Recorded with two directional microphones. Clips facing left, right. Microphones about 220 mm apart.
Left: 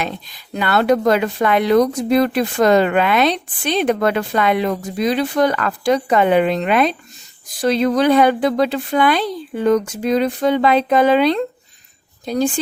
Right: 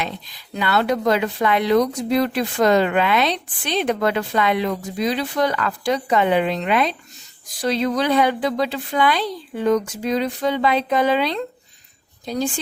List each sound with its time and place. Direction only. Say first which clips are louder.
0.5 s a woman's voice: left 4 dB; 50° left (ahead or behind)